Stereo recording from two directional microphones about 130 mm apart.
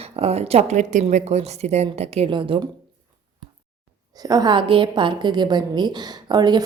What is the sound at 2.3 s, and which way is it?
Speech, 40° right (ahead or behind).